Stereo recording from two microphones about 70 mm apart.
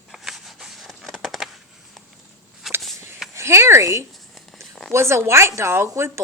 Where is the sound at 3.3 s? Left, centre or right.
Right.